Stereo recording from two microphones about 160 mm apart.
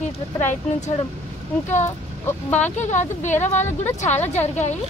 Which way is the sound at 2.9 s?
50° left (ahead or behind).